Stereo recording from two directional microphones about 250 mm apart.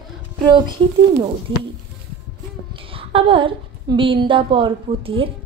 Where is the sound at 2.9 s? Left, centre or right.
Right.